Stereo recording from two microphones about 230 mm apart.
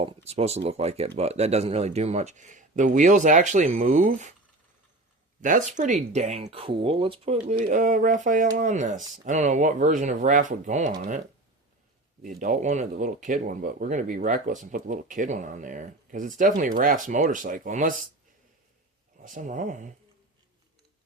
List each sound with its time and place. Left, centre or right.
0.0 s speech: right
5.4 s speech: right
12.2 s speech: right
19.2 s speech: right